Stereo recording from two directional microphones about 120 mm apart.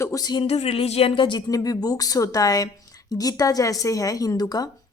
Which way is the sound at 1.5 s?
30° left (ahead or behind).